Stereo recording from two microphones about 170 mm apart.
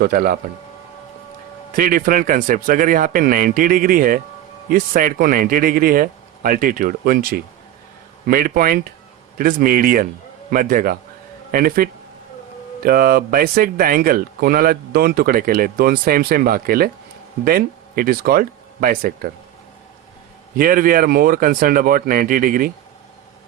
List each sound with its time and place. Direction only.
0.0 s speech: 60° right (ahead or behind)
1.7 s speech: 55° right (ahead or behind)
20.6 s speech: 55° right (ahead or behind)